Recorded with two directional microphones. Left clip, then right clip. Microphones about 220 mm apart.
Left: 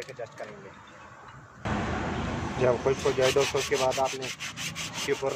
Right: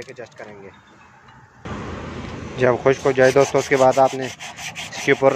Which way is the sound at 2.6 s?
45° right (ahead or behind).